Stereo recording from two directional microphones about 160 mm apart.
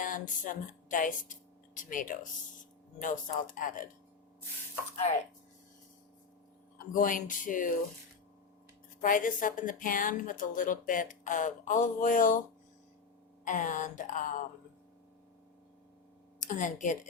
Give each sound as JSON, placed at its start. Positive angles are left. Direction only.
{"t": 0.0, "sound": "speech", "side_deg": 55}
{"t": 6.9, "sound": "speech", "side_deg": 55}
{"t": 9.0, "sound": "speech", "side_deg": 55}
{"t": 13.4, "sound": "a woman's voice", "side_deg": 55}
{"t": 16.4, "sound": "a woman's voice", "side_deg": 55}